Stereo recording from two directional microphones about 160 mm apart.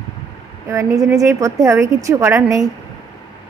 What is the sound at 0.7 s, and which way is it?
A woman's voice, 20° right (ahead or behind).